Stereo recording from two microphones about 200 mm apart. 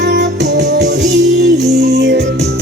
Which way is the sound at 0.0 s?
60° right (ahead or behind).